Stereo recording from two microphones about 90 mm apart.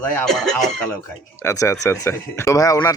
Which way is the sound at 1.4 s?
35° left (ahead or behind).